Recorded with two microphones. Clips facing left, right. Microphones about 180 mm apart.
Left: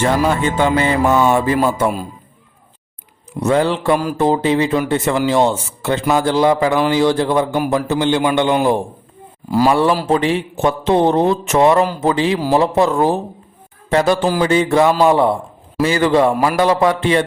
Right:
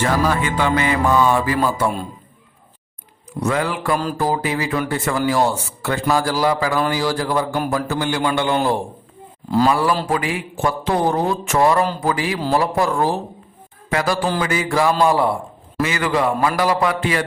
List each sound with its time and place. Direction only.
0.0 s a man's voice: 25° left (ahead or behind)
3.4 s a man's voice: 30° left (ahead or behind)
15.8 s a man's voice: 30° left (ahead or behind)